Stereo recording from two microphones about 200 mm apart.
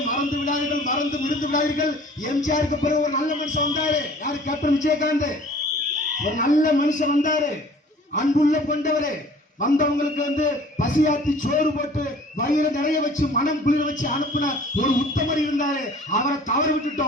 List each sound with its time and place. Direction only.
0.1 s a man's voice: 40° left (ahead or behind)
6.3 s speech: 40° left (ahead or behind)